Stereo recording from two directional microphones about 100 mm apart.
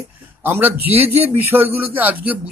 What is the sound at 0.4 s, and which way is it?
A man's voice, 20° right (ahead or behind).